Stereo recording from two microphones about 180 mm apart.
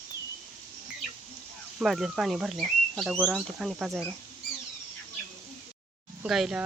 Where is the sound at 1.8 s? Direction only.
Centre (ahead or behind).